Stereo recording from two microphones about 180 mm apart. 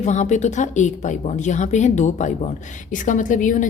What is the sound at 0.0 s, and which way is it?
A woman's voice, 40° left (ahead or behind).